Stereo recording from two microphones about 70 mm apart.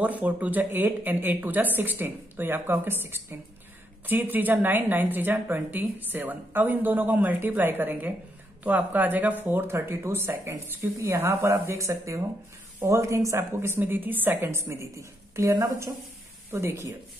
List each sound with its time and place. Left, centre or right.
0.0 s a woman's voice: right
15.0 s speech: right
16.4 s a woman's voice: right